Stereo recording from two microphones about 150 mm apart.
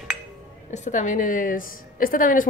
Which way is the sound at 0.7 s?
55° left (ahead or behind).